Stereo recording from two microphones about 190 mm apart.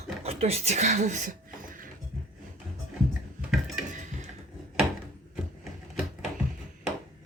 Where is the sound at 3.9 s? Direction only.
40° right (ahead or behind).